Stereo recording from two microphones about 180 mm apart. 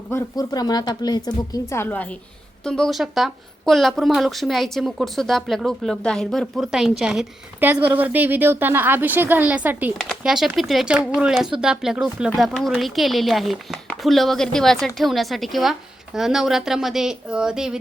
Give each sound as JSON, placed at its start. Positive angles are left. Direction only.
{"t": 0.1, "sound": "speech", "side_deg": 15}